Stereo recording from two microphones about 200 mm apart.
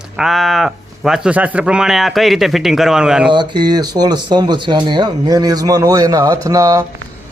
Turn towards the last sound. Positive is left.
turn(degrees=-15)  # may be behind; listen again after turning